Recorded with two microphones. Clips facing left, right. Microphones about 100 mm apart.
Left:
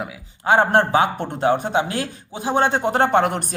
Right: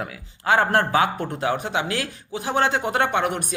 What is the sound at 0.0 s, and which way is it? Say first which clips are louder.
A man's voice: left 2 dB; 25° left (ahead or behind).